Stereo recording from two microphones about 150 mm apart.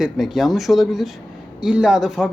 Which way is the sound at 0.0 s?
Centre (ahead or behind).